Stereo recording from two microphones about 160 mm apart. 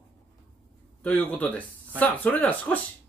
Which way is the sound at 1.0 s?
10° left (ahead or behind).